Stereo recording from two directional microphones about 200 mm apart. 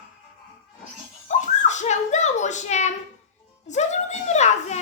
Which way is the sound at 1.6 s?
35° left (ahead or behind).